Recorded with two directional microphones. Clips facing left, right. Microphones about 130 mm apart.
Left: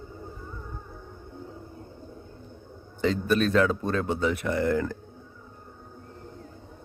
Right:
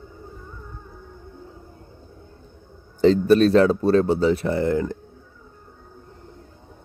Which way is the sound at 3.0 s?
35° right (ahead or behind).